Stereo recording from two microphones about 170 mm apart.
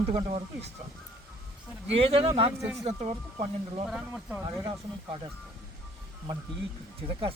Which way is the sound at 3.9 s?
5° right (ahead or behind).